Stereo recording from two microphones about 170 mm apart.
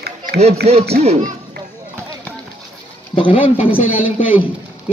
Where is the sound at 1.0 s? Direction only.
40° right (ahead or behind).